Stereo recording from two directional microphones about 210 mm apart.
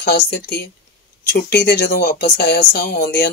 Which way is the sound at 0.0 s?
50° left (ahead or behind).